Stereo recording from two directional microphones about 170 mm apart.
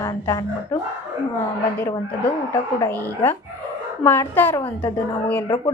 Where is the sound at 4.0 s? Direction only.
10° left (ahead or behind).